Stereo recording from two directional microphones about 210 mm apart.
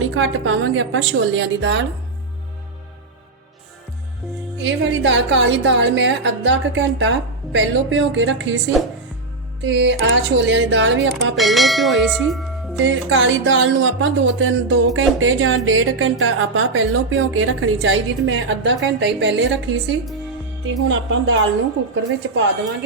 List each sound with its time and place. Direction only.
0.0 s a woman's voice: 65° right (ahead or behind)
4.6 s a woman's voice: 60° right (ahead or behind)
9.6 s a woman's voice: 60° right (ahead or behind)
11.3 s speech: centre (ahead or behind)
12.8 s speech: 65° right (ahead or behind)